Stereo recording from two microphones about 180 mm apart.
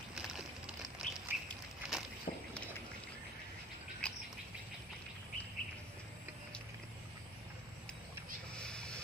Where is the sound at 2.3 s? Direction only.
40° left (ahead or behind).